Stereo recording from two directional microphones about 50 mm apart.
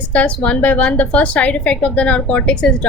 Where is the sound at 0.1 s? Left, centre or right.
Left.